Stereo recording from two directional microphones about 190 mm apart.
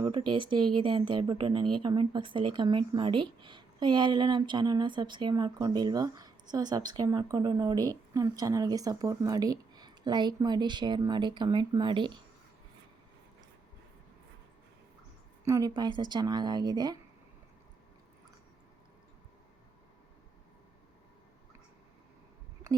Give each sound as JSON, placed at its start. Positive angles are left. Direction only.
{"t": 0.0, "sound": "speech", "side_deg": -25}
{"t": 15.4, "sound": "speech", "side_deg": -20}